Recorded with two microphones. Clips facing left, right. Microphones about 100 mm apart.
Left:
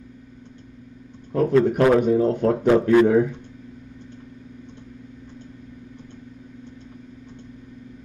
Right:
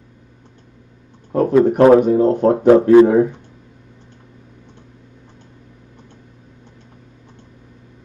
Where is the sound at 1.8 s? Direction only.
35° right (ahead or behind).